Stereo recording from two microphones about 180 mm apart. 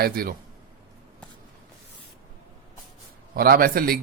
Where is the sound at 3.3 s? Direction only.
55° right (ahead or behind).